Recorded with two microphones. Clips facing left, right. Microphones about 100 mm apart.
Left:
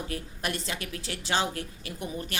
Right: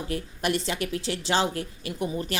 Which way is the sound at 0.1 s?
30° right (ahead or behind).